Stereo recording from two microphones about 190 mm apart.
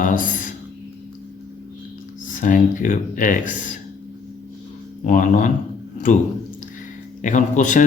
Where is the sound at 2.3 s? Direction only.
45° left (ahead or behind).